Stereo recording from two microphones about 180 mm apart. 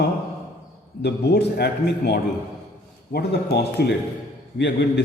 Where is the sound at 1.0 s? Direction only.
65° left (ahead or behind).